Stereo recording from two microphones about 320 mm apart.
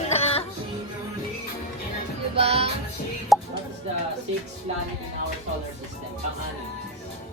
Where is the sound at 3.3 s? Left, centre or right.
Centre.